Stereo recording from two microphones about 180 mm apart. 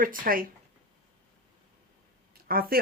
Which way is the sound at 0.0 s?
50° right (ahead or behind).